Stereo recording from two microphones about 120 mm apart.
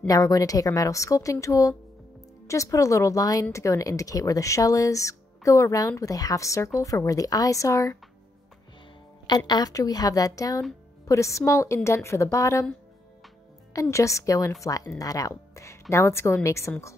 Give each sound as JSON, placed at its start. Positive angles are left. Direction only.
{"t": 0.0, "sound": "speech", "side_deg": 30}
{"t": 9.5, "sound": "speech", "side_deg": 30}
{"t": 13.7, "sound": "a woman's voice", "side_deg": 25}